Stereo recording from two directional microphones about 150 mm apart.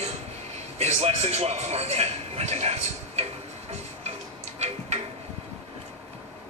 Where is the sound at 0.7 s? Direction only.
45° right (ahead or behind).